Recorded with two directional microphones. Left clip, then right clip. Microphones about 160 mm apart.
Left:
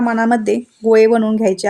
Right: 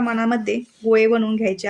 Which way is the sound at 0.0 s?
30° left (ahead or behind).